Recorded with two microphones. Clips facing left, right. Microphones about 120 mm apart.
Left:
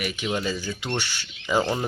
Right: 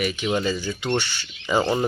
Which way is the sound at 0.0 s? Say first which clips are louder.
Right 4 dB; 5° left (ahead or behind).